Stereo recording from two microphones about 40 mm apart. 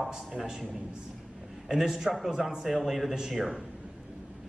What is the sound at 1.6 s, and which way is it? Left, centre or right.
A man's voice, centre.